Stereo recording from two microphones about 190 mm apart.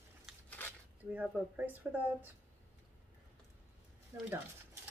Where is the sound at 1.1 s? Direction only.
10° right (ahead or behind).